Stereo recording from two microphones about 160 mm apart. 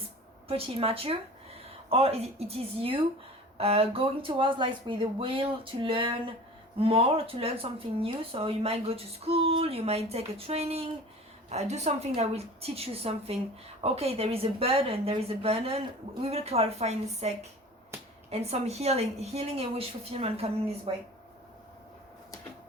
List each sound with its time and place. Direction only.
0.4 s speech: 35° right (ahead or behind)